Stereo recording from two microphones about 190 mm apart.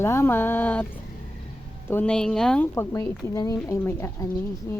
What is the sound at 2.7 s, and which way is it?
Speech, 15° left (ahead or behind).